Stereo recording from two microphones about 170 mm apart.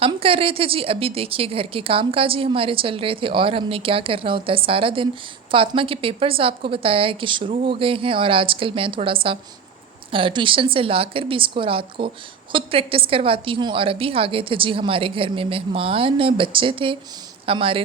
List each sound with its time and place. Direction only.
0.0 s speech: 35° right (ahead or behind)